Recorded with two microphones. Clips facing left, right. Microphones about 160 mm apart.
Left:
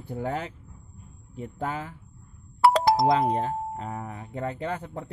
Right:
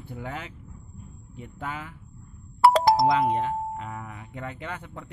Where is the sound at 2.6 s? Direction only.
35° right (ahead or behind).